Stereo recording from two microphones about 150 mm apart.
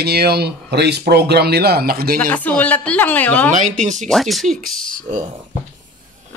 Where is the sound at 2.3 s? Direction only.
10° left (ahead or behind).